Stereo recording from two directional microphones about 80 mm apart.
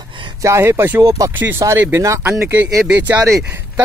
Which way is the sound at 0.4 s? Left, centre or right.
Right.